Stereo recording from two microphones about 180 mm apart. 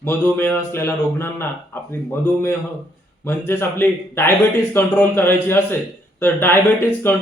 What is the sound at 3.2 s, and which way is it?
Speech, 15° left (ahead or behind).